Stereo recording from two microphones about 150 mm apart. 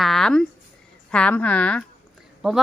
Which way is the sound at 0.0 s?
Centre (ahead or behind).